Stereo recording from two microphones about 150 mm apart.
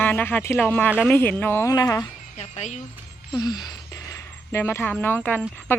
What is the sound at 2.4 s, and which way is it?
Speech, 50° left (ahead or behind).